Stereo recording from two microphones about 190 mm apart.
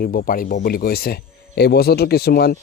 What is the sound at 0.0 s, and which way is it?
Speech, 50° left (ahead or behind).